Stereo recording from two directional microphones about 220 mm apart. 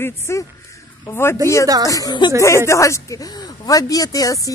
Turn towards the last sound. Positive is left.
turn(degrees=15)  # may be behind; listen again after turning